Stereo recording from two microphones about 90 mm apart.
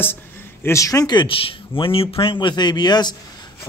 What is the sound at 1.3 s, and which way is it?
Speech, 80° left.